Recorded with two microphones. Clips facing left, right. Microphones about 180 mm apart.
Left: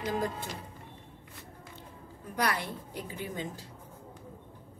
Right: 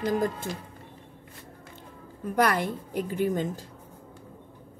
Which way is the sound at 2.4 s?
50° right (ahead or behind).